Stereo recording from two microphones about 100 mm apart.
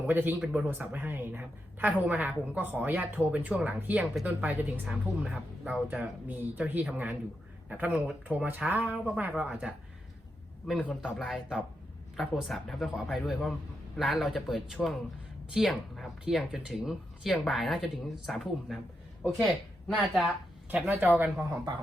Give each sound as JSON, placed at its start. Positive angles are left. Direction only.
{"t": 0.1, "sound": "a woman's voice", "side_deg": -20}
{"t": 4.0, "sound": "speech", "side_deg": 0}
{"t": 4.3, "sound": "a woman's voice", "side_deg": -15}
{"t": 20.0, "sound": "speech", "side_deg": 0}
{"t": 20.7, "sound": "a woman's voice", "side_deg": -15}
{"t": 21.5, "sound": "speech", "side_deg": -40}